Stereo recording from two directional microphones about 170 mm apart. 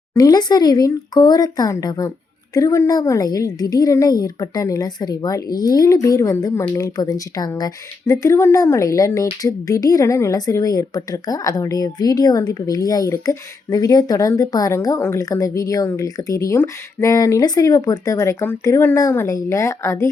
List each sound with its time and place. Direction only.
0.1 s a woman's voice: 20° left (ahead or behind)